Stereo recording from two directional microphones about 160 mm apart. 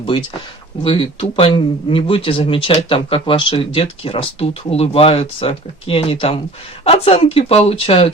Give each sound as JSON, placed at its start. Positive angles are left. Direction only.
{"t": 0.0, "sound": "speech", "side_deg": 30}